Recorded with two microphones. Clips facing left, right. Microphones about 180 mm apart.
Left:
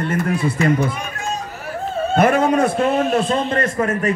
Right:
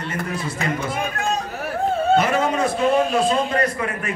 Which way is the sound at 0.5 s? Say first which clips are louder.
Left 6 dB; 55° right (ahead or behind).